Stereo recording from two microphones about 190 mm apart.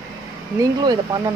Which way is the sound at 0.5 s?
20° right (ahead or behind).